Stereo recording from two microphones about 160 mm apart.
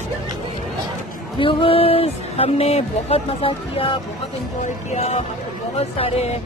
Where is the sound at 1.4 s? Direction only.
35° left (ahead or behind).